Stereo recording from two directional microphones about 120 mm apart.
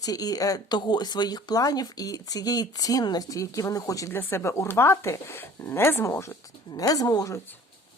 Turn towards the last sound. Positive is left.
turn(degrees=30)  # may be behind; listen again after turning